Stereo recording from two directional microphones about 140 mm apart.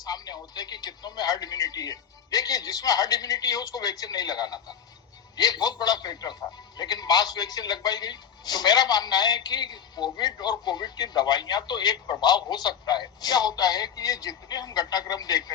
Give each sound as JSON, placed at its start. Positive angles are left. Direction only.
{"t": 0.0, "sound": "a man's voice", "side_deg": 25}